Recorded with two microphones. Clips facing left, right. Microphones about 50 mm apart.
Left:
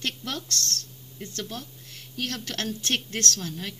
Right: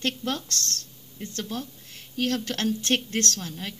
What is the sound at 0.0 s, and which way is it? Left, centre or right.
Speech, right.